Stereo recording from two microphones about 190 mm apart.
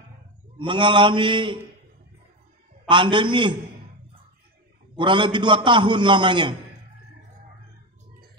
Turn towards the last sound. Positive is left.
turn(degrees=-25)  # may be behind; listen again after turning